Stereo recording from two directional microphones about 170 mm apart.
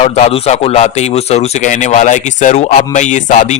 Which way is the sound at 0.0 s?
40° left (ahead or behind).